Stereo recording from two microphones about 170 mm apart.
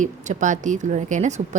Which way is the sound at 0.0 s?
45° right (ahead or behind).